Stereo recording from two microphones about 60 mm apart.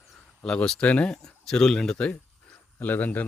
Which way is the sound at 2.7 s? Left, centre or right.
Left.